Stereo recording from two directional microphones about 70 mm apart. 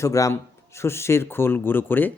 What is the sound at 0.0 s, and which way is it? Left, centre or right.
Speech, left.